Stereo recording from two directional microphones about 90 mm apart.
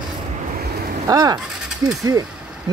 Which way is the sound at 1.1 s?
45° right (ahead or behind).